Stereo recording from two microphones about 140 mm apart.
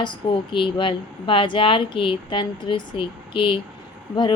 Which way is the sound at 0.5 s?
35° left (ahead or behind).